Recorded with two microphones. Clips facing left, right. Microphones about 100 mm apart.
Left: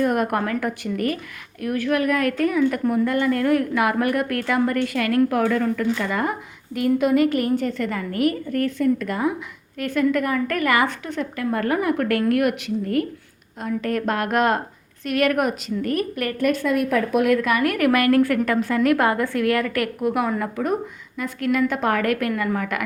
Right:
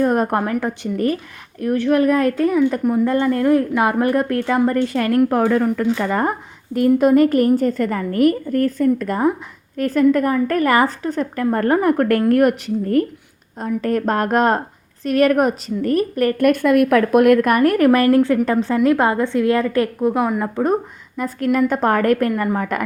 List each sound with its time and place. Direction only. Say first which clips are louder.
0.0 s a woman's voice: right 3 dB; 35° right (ahead or behind)
16.4 s speech: right 6 dB; 55° right (ahead or behind)
17.6 s a woman's voice: right 5 dB; 35° right (ahead or behind)